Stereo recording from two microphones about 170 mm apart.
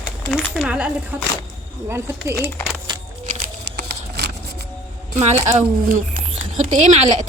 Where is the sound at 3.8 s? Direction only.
75° right (ahead or behind).